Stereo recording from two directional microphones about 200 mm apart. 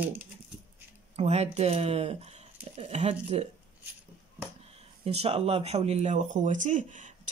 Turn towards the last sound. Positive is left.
turn(degrees=-40)  # may be behind; listen again after turning